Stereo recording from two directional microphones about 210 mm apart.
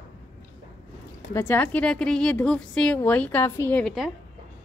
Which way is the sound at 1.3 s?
10° left (ahead or behind).